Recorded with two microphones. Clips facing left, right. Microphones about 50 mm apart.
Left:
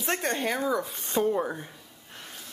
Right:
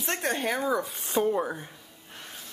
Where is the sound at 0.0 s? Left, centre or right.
Centre.